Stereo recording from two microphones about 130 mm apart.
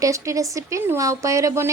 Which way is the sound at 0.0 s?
25° right (ahead or behind).